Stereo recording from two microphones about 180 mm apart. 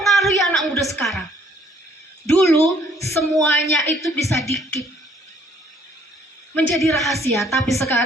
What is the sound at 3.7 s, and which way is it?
Speech, centre (ahead or behind).